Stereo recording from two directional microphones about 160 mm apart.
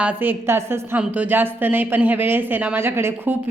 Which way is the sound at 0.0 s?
10° right (ahead or behind).